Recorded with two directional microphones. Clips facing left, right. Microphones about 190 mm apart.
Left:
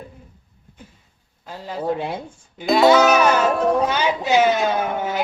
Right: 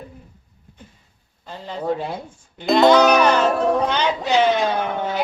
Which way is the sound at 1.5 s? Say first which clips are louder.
Even; 5° left (ahead or behind).